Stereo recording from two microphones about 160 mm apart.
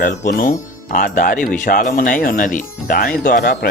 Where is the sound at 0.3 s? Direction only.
55° left (ahead or behind).